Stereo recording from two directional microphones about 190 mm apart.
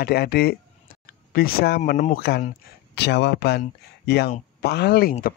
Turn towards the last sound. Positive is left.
turn(degrees=55)  # may be behind; listen again after turning